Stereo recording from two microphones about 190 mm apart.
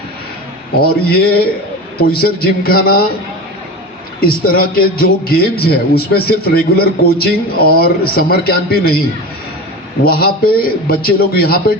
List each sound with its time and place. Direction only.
0.8 s a man's voice: 55° left (ahead or behind)
4.2 s a man's voice: 50° left (ahead or behind)
10.0 s a man's voice: 50° left (ahead or behind)